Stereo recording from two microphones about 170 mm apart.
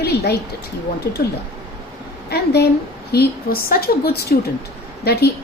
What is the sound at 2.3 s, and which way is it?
A woman's voice, 70° left (ahead or behind).